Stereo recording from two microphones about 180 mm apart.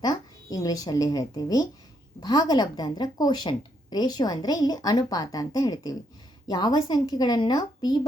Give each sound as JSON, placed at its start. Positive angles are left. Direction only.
{"t": 0.0, "sound": "a woman's voice", "side_deg": 20}